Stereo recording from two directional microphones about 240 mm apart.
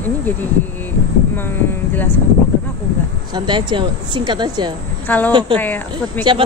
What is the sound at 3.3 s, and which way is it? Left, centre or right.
A woman's voice, centre.